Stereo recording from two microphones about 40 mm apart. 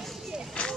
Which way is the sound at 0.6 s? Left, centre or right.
Left.